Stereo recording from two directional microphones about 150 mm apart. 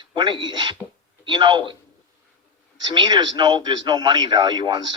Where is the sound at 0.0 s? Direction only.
30° right (ahead or behind).